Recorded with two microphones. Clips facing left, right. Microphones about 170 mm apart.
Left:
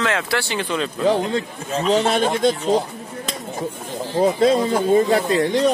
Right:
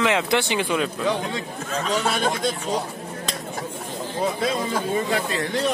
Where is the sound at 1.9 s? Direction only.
35° left (ahead or behind).